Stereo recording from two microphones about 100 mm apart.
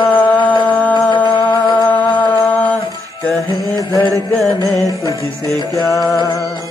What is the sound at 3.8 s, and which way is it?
Music, 35° left (ahead or behind).